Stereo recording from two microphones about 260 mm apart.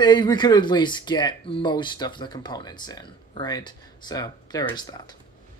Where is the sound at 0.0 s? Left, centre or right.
Centre.